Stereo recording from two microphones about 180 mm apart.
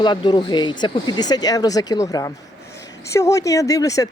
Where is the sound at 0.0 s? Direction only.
25° left (ahead or behind).